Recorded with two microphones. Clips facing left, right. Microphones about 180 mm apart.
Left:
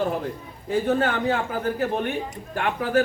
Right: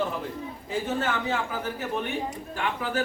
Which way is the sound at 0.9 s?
55° left (ahead or behind).